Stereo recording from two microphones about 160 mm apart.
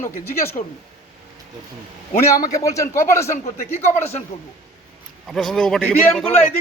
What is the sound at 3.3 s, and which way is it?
Speech, 55° left (ahead or behind).